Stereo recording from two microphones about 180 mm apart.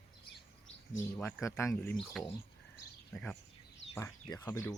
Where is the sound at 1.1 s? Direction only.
15° left (ahead or behind).